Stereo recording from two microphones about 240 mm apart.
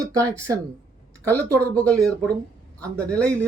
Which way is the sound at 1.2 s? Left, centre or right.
Centre.